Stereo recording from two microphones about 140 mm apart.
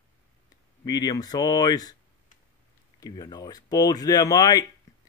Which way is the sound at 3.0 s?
30° left (ahead or behind).